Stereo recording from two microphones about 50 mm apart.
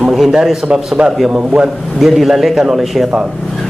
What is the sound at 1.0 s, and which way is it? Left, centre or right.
Speech, right.